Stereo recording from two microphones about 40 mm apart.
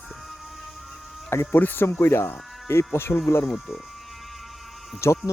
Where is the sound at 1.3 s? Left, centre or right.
Left.